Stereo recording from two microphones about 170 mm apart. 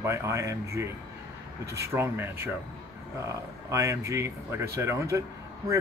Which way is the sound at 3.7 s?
20° right (ahead or behind).